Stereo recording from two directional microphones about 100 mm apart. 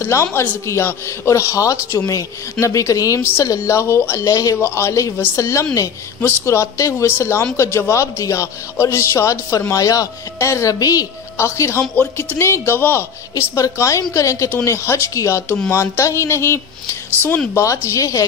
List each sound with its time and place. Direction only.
0.0 s a man's voice: 25° left (ahead or behind)